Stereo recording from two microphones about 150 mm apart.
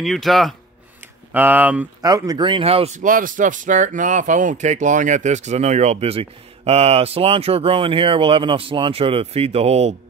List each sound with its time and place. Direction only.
0.0 s speech: centre (ahead or behind)
1.3 s speech: 10° right (ahead or behind)
2.0 s speech: 25° right (ahead or behind); by 3.0 s 40° right (ahead or behind)
3.0 s speech: 65° right (ahead or behind); by 9.9 s 45° right (ahead or behind)